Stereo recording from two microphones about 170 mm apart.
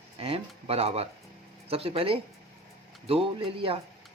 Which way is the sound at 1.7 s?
35° right (ahead or behind).